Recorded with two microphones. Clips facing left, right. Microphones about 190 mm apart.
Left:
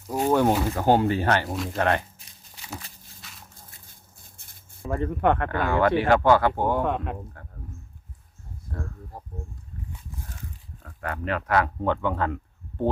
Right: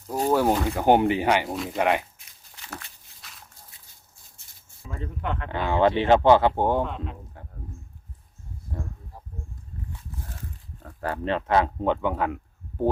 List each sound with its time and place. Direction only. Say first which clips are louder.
0.3 s speech: left 1 dB; 5° right (ahead or behind)
0.8 s speech: right 3 dB; 15° right (ahead or behind)
1.5 s speech: even; centre (ahead or behind)
1.8 s speech: right 1 dB; 15° right (ahead or behind)
3.2 s a sound: left 1 dB; centre (ahead or behind)
3.7 s a sound: left 4 dB; 50° left (ahead or behind)
5.5 s speech: even; 20° right (ahead or behind)
6.8 s speech: left 7 dB; 60° left (ahead or behind)
11.0 s speech: right 2 dB; 30° right (ahead or behind); by 12.4 s 10° right (ahead or behind)